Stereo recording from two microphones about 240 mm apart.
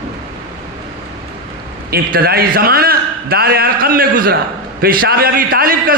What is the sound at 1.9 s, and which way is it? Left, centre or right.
A man's voice, right.